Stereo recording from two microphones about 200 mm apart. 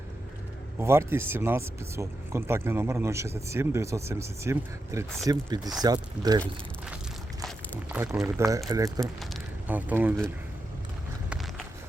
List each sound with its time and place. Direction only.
0.8 s speech: 10° right (ahead or behind)
7.9 s speech: 10° right (ahead or behind)
9.3 s a sound: 10° right (ahead or behind)
11.3 s walk: centre (ahead or behind)